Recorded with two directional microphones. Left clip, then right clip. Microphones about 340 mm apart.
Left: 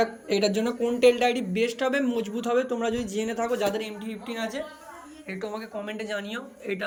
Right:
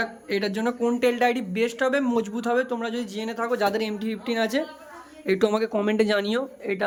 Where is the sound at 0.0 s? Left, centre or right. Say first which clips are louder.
Left 2 dB; centre.